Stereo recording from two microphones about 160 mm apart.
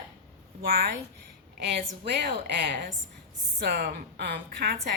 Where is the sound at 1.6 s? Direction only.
90° right.